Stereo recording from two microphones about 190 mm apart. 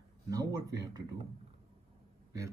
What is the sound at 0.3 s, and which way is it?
Speech, 20° right (ahead or behind).